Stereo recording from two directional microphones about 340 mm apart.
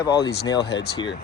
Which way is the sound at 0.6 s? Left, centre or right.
Left.